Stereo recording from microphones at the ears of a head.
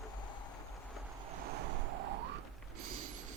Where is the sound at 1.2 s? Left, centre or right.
Right.